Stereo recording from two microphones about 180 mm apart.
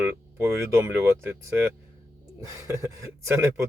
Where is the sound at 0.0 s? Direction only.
15° right (ahead or behind).